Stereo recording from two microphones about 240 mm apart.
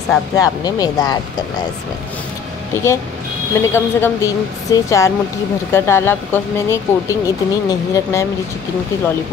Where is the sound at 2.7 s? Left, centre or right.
Centre.